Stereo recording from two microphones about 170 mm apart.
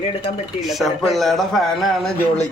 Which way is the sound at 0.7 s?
Centre (ahead or behind).